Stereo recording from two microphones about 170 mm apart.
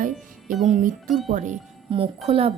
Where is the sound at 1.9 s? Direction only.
35° right (ahead or behind).